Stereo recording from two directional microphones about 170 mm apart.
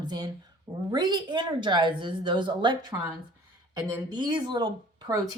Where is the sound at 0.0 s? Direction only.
25° right (ahead or behind).